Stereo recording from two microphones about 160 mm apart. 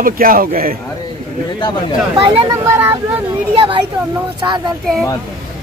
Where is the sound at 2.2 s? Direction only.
35° right (ahead or behind).